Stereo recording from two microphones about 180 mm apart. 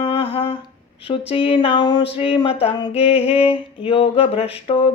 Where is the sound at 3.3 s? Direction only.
30° left (ahead or behind).